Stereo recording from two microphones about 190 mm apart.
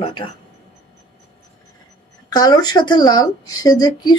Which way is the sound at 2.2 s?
20° left (ahead or behind).